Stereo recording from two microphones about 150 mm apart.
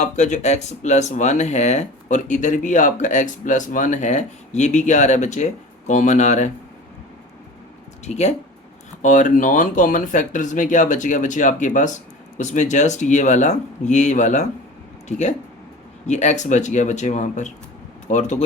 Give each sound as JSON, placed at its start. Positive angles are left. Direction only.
{"t": 0.0, "sound": "speech", "side_deg": 50}
{"t": 8.0, "sound": "speech", "side_deg": 50}